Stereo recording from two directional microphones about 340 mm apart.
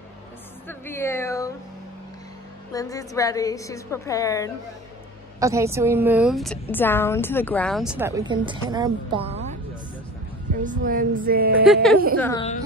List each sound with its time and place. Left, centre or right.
0.7 s a sound: centre
2.7 s a woman's voice: centre
5.4 s a woman's voice: centre
10.6 s music: right
11.6 s a woman's voice: centre
12.2 s a woman's voice: centre